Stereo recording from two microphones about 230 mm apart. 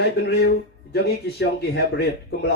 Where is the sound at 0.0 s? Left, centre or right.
Left.